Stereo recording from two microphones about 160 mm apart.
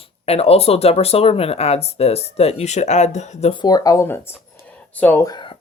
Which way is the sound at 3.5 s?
25° left (ahead or behind).